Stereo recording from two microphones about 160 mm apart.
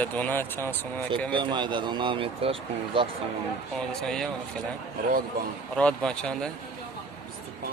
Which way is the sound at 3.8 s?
5° left (ahead or behind).